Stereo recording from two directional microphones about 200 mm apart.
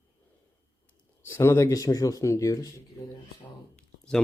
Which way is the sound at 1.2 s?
10° left (ahead or behind).